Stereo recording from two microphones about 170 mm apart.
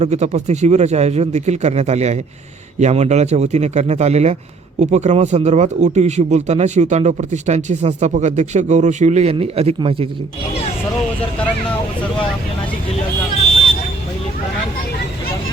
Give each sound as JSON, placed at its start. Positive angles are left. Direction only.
{"t": 0.0, "sound": "speech", "side_deg": -40}